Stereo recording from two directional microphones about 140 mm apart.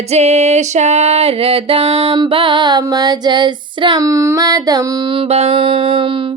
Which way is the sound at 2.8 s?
30° right (ahead or behind).